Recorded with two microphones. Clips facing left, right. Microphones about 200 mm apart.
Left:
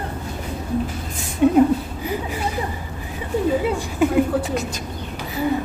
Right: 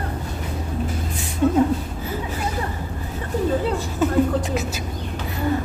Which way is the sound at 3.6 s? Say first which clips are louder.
Left 2 dB; 10° left (ahead or behind).